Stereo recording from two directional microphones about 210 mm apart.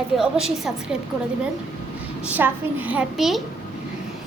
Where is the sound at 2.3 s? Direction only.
10° right (ahead or behind).